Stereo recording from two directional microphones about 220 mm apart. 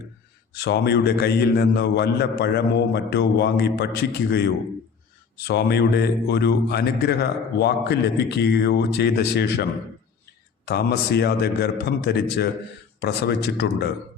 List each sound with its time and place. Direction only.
0.5 s a man's voice: 50° left (ahead or behind)
10.7 s a man's voice: 45° left (ahead or behind)